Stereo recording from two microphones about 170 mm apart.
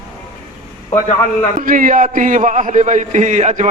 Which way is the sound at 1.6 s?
55° right (ahead or behind).